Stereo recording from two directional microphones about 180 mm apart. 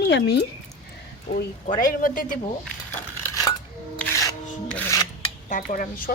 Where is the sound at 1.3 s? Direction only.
35° left (ahead or behind).